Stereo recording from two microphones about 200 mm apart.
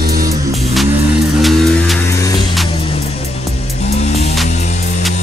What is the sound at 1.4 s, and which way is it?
Music, centre (ahead or behind).